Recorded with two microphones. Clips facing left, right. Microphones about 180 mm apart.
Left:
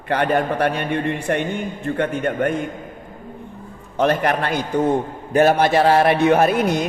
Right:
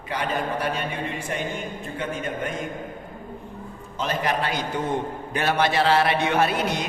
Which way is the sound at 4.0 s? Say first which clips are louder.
Left 7 dB; 60° left (ahead or behind).